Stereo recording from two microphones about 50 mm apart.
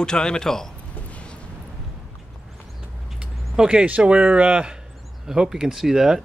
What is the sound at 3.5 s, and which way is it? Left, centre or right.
A man's voice, right.